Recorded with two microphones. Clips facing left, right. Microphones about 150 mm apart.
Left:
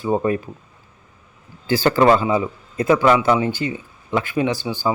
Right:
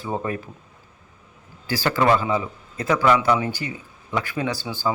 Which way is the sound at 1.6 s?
25° left (ahead or behind).